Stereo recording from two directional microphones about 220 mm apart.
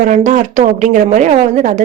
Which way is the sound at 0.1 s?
35° right (ahead or behind).